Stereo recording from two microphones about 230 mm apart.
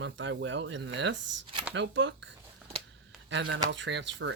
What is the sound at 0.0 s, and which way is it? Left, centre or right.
Speech, right.